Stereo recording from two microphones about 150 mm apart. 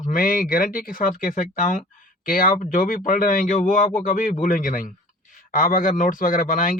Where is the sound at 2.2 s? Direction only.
70° left (ahead or behind).